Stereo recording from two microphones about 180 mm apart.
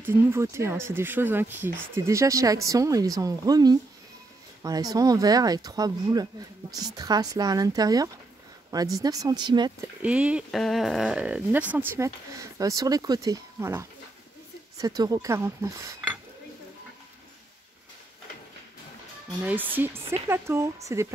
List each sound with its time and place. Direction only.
0.0 s speech: 15° right (ahead or behind)
10.0 s speech: 5° right (ahead or behind)
19.4 s speech: 10° right (ahead or behind)